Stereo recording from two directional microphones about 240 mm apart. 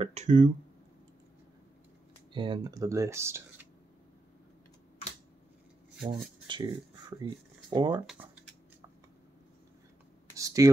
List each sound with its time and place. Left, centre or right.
0.0 s speech: right
2.3 s speech: centre
6.0 s speech: centre
10.3 s speech: centre